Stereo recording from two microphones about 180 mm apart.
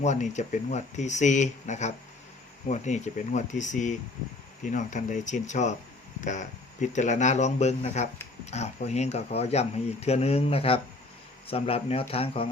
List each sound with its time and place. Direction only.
0.0 s speech: 40° left (ahead or behind)